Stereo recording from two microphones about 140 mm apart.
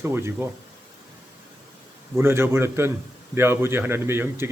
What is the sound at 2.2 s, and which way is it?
A man's voice, 15° right (ahead or behind).